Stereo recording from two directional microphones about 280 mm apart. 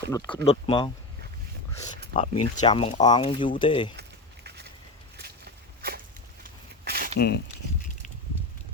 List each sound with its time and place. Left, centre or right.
0.1 s speech: centre
2.1 s speech: centre
5.1 s a sound: right
7.2 s speech: left